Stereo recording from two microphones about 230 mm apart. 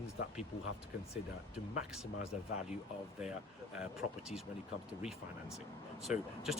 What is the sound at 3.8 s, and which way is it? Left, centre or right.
Speech, centre.